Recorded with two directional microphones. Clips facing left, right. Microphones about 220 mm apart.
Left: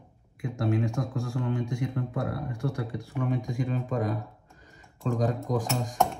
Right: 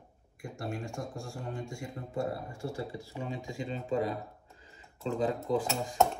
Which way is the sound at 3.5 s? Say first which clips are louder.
Left 4 dB; 50° left (ahead or behind).